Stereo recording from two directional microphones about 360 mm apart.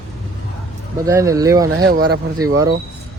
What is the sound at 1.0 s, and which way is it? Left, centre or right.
Speech, centre.